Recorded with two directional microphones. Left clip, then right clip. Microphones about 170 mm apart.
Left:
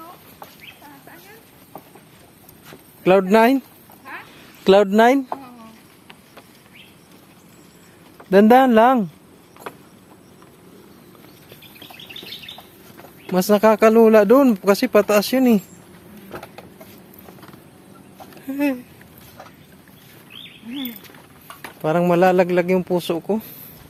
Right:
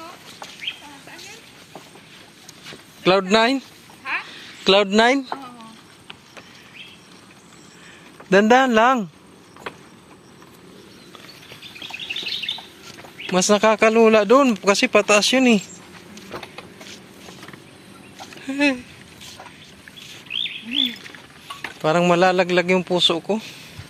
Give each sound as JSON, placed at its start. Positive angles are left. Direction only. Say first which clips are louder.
{"t": 3.0, "sound": "speech", "louder": "left 2 dB", "side_deg": 25}
{"t": 4.6, "sound": "speech", "louder": "left 2 dB", "side_deg": 45}
{"t": 4.9, "sound": "speech", "louder": "left 2 dB", "side_deg": 20}
{"t": 8.3, "sound": "speech", "louder": "left 2 dB", "side_deg": 10}
{"t": 13.3, "sound": "speech", "louder": "left 1 dB", "side_deg": 25}
{"t": 18.4, "sound": "a sound", "louder": "right 3 dB", "side_deg": 15}
{"t": 21.8, "sound": "speech", "louder": "even", "side_deg": 20}
{"t": 23.0, "sound": "speech", "louder": "right 5 dB", "side_deg": 30}